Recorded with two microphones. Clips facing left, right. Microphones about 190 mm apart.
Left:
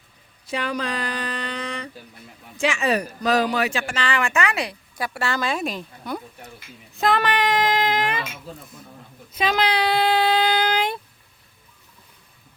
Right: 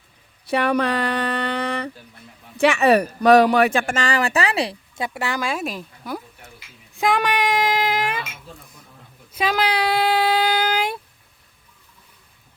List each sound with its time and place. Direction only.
0.4 s speech: 60° right (ahead or behind); by 6.2 s 5° right (ahead or behind)
6.9 s child singing: 15° right (ahead or behind)
9.3 s speech: 10° right (ahead or behind)